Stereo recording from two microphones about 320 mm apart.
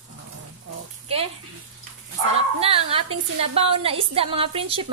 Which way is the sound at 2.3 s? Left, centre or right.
Centre.